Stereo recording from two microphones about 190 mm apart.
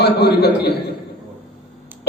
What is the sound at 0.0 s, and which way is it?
Speech, 60° left (ahead or behind).